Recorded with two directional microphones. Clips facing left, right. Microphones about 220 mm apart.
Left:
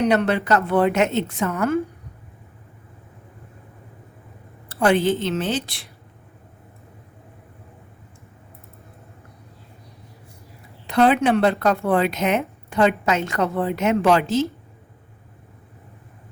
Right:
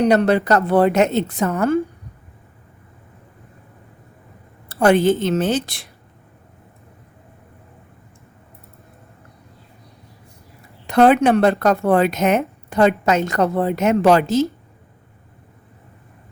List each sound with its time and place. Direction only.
0.0 s speech: 35° right (ahead or behind)
4.7 s a woman's voice: 45° right (ahead or behind)
10.8 s speech: 45° right (ahead or behind)